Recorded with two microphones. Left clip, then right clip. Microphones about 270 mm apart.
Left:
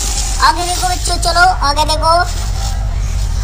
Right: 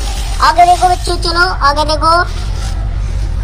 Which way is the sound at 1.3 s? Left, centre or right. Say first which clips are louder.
Even; centre.